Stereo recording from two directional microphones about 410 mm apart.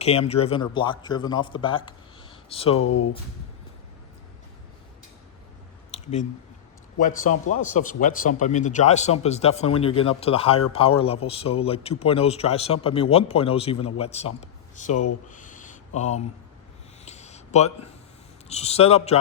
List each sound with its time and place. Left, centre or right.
0.0 s a man's voice: centre
2.7 s speech: left
5.9 s a sound: centre
7.5 s a man's voice: centre
15.3 s a sound: centre
18.4 s a man's voice: centre